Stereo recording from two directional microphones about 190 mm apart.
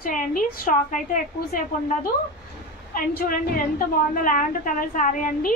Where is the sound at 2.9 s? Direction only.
50° left (ahead or behind).